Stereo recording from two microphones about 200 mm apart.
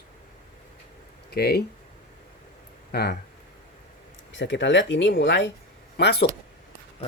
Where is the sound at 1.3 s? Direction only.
55° left (ahead or behind).